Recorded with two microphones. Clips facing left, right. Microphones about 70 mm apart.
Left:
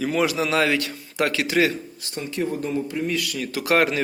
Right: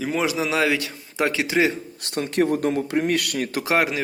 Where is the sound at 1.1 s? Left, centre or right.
Centre.